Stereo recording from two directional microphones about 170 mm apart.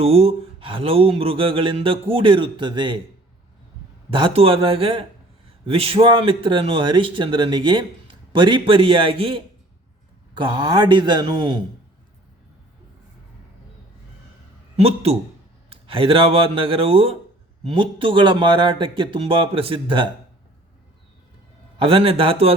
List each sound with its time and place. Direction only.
0.0 s mantra: 35° right (ahead or behind)
4.1 s mantra: 30° right (ahead or behind)
10.3 s speech: 25° right (ahead or behind)
14.8 s mantra: 35° right (ahead or behind)
17.7 s speech: 30° right (ahead or behind)
21.8 s mantra: 35° right (ahead or behind)